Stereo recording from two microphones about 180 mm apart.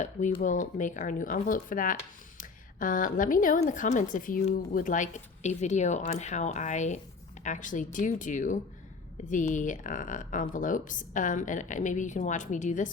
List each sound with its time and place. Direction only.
0.0 s a woman's voice: 45° left (ahead or behind)